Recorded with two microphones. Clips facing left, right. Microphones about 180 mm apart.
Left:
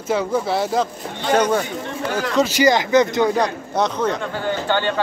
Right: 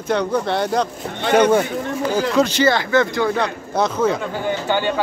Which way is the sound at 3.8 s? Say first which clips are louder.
Right 2 dB; 5° right (ahead or behind).